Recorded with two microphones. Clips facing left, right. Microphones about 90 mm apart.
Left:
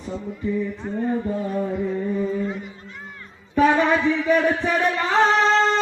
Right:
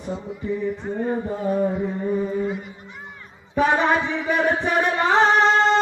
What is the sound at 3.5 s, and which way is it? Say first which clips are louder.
Music: left 1 dB; 20° right (ahead or behind).